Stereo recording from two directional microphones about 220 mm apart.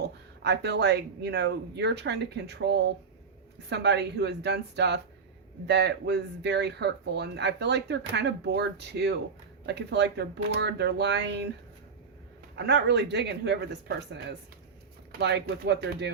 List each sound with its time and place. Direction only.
0.0 s speech: 50° right (ahead or behind)
12.5 s speech: 50° right (ahead or behind)